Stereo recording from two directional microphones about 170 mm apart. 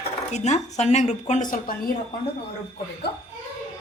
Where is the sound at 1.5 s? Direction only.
60° left (ahead or behind).